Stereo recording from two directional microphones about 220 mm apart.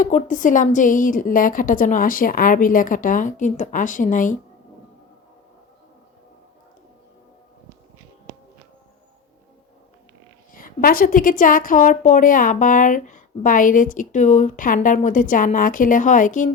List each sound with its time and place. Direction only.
0.0 s a woman's voice: 35° left (ahead or behind)
10.5 s a woman's voice: 40° left (ahead or behind)